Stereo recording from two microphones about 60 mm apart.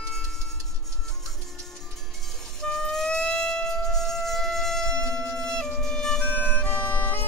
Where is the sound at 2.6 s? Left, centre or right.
Centre.